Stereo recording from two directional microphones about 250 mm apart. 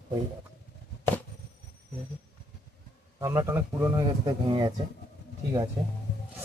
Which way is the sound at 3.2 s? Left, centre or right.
Centre.